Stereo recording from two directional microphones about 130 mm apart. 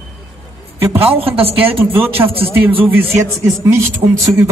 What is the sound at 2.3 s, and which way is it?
A man's voice, 15° right (ahead or behind).